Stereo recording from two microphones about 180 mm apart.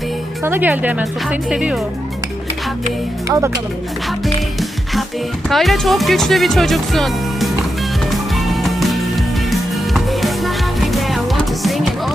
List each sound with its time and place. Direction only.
0.4 s speech: 10° right (ahead or behind)
3.2 s speech: 15° right (ahead or behind)
5.5 s speech: centre (ahead or behind)
8.1 s music: centre (ahead or behind)